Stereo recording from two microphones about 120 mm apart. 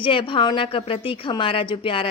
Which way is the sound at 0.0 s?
45° left (ahead or behind).